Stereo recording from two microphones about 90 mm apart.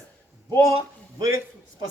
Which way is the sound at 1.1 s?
50° right (ahead or behind).